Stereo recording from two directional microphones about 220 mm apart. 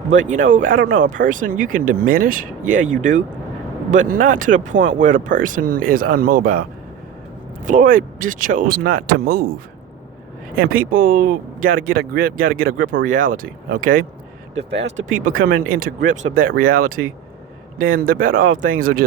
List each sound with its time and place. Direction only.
0.3 s speech: 35° right (ahead or behind)
10.5 s speech: 40° right (ahead or behind)
14.6 s speech: 50° right (ahead or behind)
15.2 s speech: 40° right (ahead or behind)